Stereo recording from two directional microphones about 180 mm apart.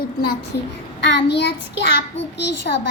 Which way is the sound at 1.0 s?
85° left.